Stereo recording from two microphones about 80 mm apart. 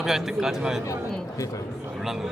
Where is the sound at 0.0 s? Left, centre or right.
Centre.